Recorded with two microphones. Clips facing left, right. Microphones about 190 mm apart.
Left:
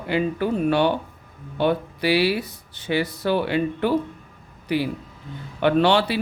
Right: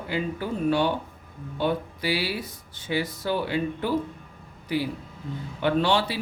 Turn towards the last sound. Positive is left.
turn(degrees=70)  # may be behind; listen again after turning